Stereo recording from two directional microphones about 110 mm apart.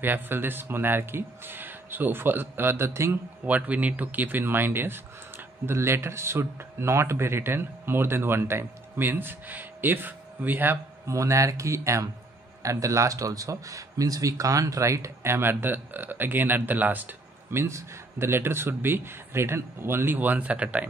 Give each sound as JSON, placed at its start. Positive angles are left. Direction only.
{"t": 0.0, "sound": "speech", "side_deg": -20}